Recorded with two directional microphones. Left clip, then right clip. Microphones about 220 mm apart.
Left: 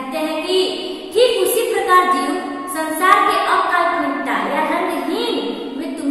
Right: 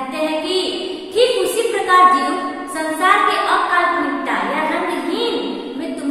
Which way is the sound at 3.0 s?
Centre (ahead or behind).